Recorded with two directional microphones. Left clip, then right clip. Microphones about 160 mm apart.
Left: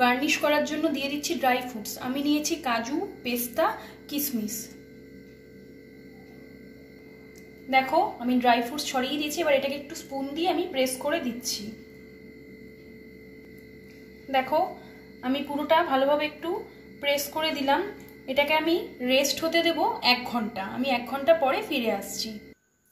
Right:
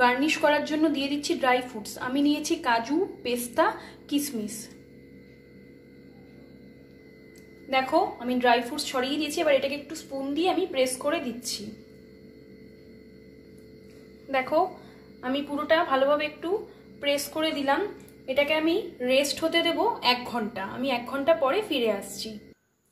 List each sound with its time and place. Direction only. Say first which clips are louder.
0.0 s a woman's voice: right 1 dB; 55° right (ahead or behind)
7.7 s a woman's voice: left 1 dB; 55° right (ahead or behind)
15.3 s a woman's voice: left 1 dB; 55° right (ahead or behind)